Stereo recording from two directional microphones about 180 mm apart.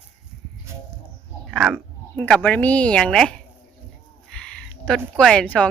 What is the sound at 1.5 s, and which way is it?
A woman's voice, 5° left (ahead or behind).